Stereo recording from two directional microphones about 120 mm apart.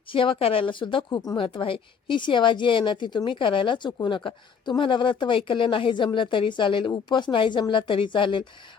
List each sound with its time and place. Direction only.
0.1 s speech: 45° left (ahead or behind)